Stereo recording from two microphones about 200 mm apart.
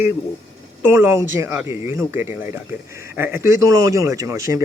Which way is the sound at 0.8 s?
10° right (ahead or behind).